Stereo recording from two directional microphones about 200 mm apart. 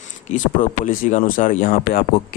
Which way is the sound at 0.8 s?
40° left (ahead or behind).